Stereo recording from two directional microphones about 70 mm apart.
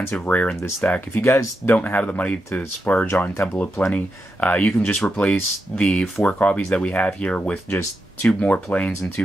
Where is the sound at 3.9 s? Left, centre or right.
Left.